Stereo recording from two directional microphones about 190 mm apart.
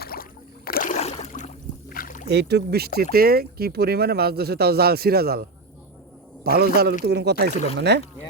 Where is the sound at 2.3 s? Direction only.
60° right (ahead or behind).